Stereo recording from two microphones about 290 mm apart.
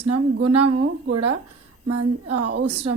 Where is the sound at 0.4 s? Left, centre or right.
Right.